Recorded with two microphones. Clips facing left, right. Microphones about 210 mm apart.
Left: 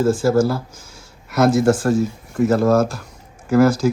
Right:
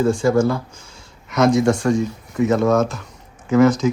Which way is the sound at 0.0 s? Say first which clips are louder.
Even; 5° left (ahead or behind).